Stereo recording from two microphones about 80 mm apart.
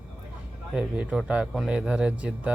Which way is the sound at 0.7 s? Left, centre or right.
Centre.